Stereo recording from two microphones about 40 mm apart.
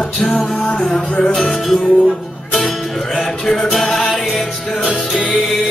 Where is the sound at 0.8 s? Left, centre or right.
Centre.